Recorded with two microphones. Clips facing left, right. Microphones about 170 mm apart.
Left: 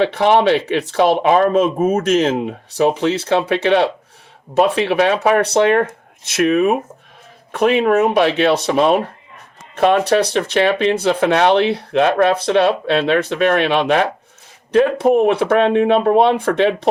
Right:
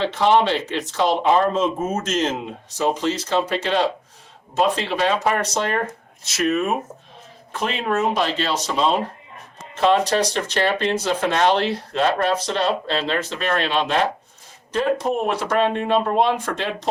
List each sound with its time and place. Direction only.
0.0 s speech: 65° left (ahead or behind)